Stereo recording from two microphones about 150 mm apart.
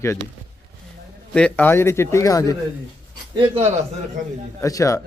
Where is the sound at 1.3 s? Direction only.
10° left (ahead or behind).